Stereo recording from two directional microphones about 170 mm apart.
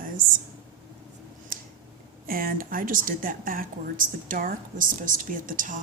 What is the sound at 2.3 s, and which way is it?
Speech, 55° right (ahead or behind).